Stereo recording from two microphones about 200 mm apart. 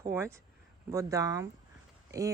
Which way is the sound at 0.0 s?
15° right (ahead or behind).